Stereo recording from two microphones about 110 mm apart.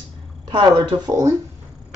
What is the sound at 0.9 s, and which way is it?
Speech, 50° right (ahead or behind).